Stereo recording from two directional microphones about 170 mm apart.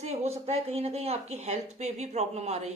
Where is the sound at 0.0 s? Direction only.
40° right (ahead or behind).